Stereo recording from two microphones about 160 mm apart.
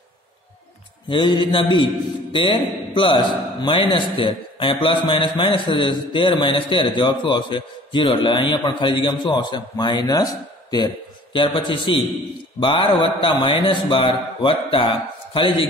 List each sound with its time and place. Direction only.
1.0 s a man's voice: 30° left (ahead or behind)